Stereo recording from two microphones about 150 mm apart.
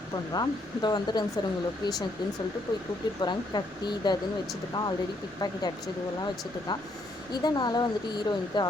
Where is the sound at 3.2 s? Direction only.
30° left (ahead or behind).